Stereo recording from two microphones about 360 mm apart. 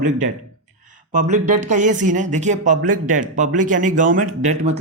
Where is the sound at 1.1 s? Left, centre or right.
Right.